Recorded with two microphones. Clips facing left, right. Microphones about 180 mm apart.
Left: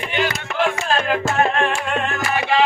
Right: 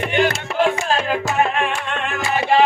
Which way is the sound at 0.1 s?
55° right (ahead or behind).